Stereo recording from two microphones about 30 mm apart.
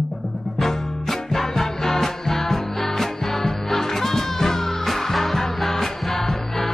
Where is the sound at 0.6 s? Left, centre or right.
Centre.